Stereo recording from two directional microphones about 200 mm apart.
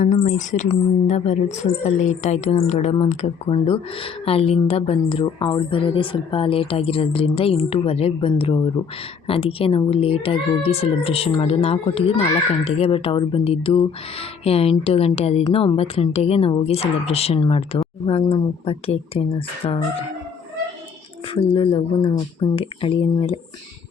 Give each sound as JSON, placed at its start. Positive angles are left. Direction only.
{"t": 0.0, "sound": "speech", "side_deg": 35}
{"t": 21.3, "sound": "speech", "side_deg": 25}